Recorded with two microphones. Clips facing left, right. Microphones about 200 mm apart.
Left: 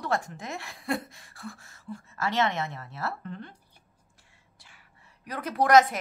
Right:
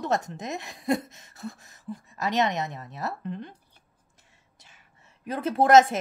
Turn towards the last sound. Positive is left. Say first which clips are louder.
# right 3 dB
turn(degrees=-25)  # may be behind; listen again after turning